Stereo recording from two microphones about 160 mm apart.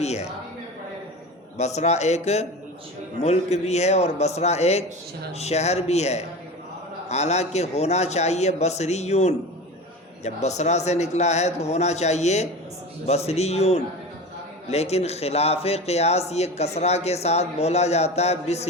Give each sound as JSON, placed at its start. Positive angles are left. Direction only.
{"t": 0.0, "sound": "speech", "side_deg": 45}
{"t": 1.5, "sound": "a man's voice", "side_deg": 45}